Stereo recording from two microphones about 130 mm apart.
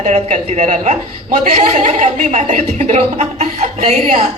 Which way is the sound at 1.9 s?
75° right (ahead or behind).